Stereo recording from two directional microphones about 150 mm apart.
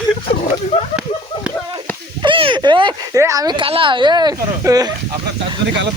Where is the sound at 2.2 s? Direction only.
35° right (ahead or behind).